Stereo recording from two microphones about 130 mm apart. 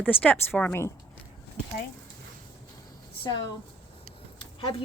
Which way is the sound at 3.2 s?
35° left (ahead or behind).